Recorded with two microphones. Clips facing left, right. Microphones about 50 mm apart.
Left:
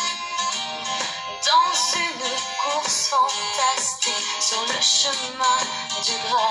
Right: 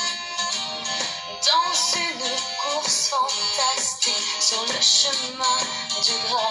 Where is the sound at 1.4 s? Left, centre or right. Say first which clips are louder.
Left 3 dB; left.